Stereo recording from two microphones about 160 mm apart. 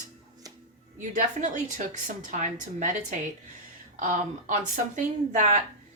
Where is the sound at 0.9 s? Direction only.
50° right (ahead or behind).